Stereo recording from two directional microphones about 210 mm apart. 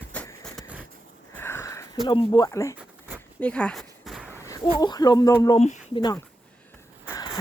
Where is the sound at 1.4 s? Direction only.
10° left (ahead or behind).